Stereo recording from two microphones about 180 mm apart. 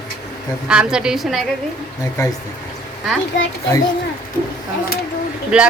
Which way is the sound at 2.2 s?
20° left (ahead or behind).